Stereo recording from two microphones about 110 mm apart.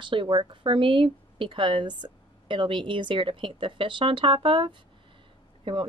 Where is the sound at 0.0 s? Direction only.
50° right (ahead or behind).